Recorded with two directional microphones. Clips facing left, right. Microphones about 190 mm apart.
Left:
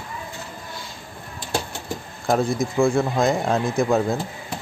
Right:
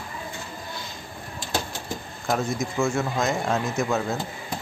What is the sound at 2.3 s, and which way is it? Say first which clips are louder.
Speech: left 5 dB; 30° left (ahead or behind).